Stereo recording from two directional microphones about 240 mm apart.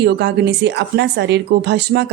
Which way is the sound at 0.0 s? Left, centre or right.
Right.